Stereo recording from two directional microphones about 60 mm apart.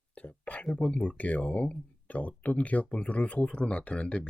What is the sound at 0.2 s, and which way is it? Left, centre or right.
Whispering, left.